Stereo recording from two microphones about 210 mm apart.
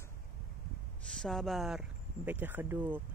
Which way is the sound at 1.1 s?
Centre (ahead or behind).